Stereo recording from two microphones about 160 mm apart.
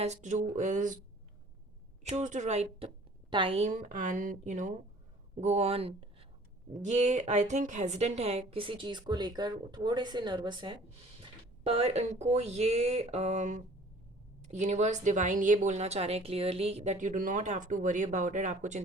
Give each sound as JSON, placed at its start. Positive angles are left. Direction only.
{"t": 0.0, "sound": "a woman's voice", "side_deg": -45}
{"t": 2.0, "sound": "a woman's voice", "side_deg": -45}
{"t": 3.7, "sound": "a woman's voice", "side_deg": -55}
{"t": 5.4, "sound": "a woman's voice", "side_deg": -40}